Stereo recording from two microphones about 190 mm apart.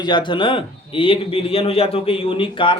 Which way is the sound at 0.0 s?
25° left (ahead or behind).